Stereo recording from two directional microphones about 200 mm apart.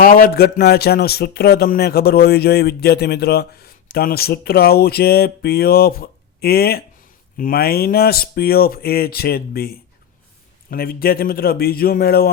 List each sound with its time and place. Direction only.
0.0 s speech: 45° left (ahead or behind)